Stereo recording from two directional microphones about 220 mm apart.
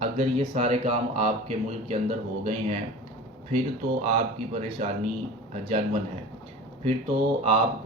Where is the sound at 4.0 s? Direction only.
30° right (ahead or behind).